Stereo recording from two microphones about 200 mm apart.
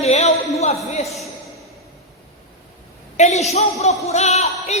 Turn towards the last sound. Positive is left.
turn(degrees=35)  # may be behind; listen again after turning